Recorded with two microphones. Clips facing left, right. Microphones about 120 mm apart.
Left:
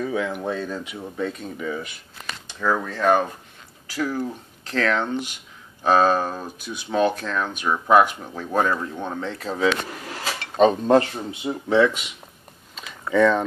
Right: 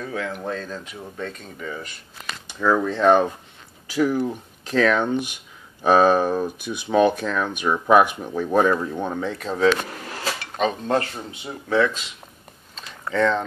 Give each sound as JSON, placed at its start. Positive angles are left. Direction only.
{"t": 0.0, "sound": "speech", "side_deg": 10}
{"t": 2.7, "sound": "speech", "side_deg": -20}
{"t": 9.4, "sound": "speech", "side_deg": 0}
{"t": 10.4, "sound": "speech", "side_deg": 30}
{"t": 11.4, "sound": "speech", "side_deg": 15}
{"t": 12.7, "sound": "a sound", "side_deg": 5}